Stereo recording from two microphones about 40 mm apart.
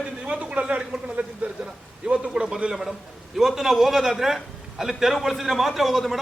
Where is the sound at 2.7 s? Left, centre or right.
Centre.